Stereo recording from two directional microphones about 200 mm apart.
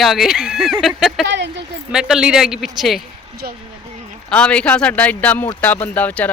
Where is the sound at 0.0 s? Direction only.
Centre (ahead or behind).